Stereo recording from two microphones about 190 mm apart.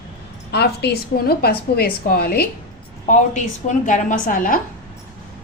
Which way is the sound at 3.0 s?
40° left (ahead or behind).